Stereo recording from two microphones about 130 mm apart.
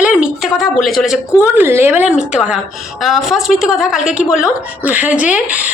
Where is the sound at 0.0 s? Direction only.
5° right (ahead or behind).